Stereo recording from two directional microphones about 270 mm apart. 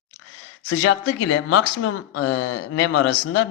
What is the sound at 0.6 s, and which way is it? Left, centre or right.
Speech, left.